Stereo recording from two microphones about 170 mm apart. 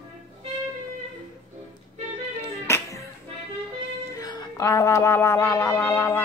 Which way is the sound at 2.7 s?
15° left (ahead or behind).